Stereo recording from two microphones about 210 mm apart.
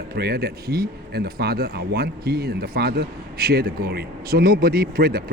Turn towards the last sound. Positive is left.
turn(degrees=-45)  # may be behind; listen again after turning